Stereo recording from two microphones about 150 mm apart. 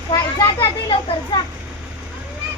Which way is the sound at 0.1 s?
30° left (ahead or behind).